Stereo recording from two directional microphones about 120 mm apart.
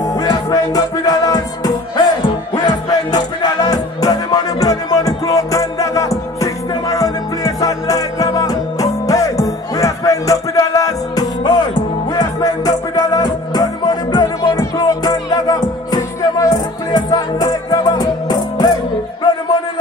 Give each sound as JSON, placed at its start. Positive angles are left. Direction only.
{"t": 0.0, "sound": "music", "side_deg": 30}